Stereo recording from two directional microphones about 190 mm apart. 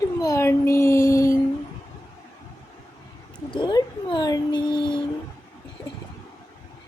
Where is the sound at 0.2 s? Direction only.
15° left (ahead or behind).